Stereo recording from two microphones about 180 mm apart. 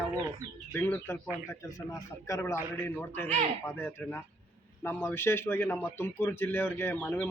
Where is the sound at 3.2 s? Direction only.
40° right (ahead or behind).